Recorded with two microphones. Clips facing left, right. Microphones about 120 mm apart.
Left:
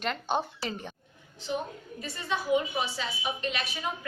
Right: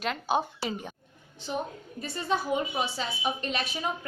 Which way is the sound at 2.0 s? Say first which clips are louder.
Right 4 dB; 40° right (ahead or behind).